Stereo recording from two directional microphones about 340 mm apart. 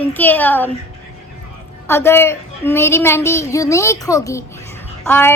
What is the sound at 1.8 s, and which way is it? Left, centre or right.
A woman's voice, centre.